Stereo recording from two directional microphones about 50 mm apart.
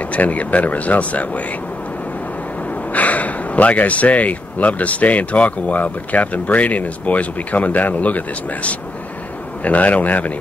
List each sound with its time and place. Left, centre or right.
0.0 s speech: left
2.9 s speech: left
9.6 s speech: left